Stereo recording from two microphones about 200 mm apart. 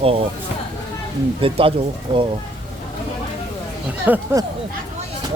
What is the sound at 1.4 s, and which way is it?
Speech, 25° right (ahead or behind).